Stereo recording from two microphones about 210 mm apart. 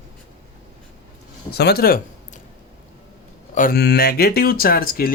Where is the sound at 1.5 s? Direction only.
50° left (ahead or behind).